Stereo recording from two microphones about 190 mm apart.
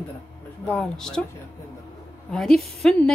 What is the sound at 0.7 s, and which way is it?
Speech, centre (ahead or behind).